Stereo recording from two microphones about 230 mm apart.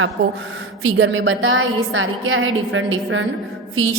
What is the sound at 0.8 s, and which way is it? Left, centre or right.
A woman's voice, right.